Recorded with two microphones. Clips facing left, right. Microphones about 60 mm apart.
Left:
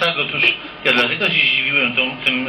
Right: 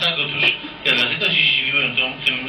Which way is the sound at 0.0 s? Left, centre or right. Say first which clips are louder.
Left 3 dB; left.